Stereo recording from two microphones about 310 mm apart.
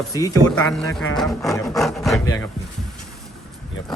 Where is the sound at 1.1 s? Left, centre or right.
Centre.